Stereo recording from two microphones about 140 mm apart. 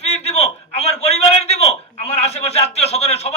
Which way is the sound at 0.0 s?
50° left (ahead or behind).